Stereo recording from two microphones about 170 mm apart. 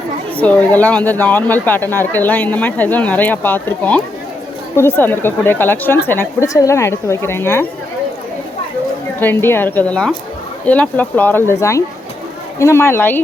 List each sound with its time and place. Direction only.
0.3 s speech: 10° left (ahead or behind)
9.2 s speech: 15° left (ahead or behind)